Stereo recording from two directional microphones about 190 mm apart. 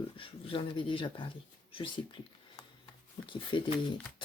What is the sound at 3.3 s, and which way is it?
Speech, 25° left (ahead or behind).